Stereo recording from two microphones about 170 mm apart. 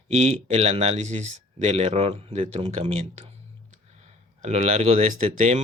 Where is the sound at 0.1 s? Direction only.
40° right (ahead or behind).